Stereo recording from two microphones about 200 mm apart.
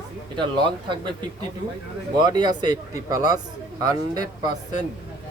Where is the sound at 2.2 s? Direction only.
20° right (ahead or behind).